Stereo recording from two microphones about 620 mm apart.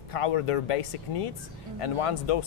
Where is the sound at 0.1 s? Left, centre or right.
Left.